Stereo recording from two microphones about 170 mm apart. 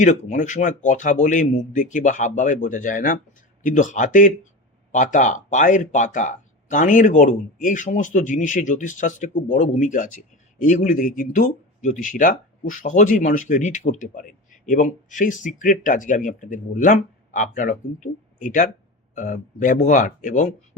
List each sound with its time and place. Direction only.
0.0 s speech: 45° left (ahead or behind)